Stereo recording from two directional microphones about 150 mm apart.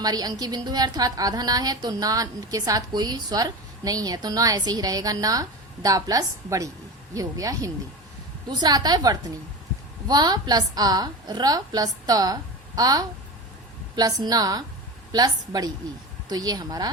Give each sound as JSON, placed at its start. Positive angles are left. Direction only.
{"t": 0.0, "sound": "a woman's voice", "side_deg": -25}